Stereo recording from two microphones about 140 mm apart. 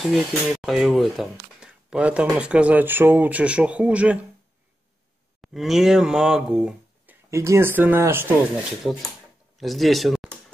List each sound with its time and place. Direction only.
0.0 s speech: 5° right (ahead or behind)
5.4 s speech: centre (ahead or behind)
7.2 s speech: 20° right (ahead or behind)
9.6 s speech: centre (ahead or behind)